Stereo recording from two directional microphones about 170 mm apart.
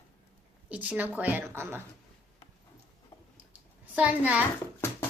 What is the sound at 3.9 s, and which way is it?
Speech, 10° right (ahead or behind).